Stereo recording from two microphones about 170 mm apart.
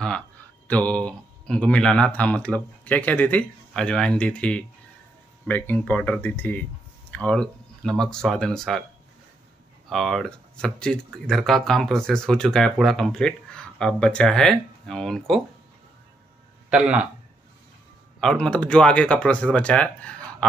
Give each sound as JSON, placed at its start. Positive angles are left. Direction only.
{"t": 0.7, "sound": "speech", "side_deg": 10}
{"t": 9.8, "sound": "speech", "side_deg": 0}
{"t": 16.7, "sound": "speech", "side_deg": -5}
{"t": 18.2, "sound": "speech", "side_deg": 5}